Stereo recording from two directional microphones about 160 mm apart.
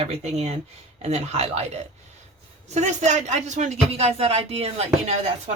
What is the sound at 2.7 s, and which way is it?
Speech, 45° right (ahead or behind).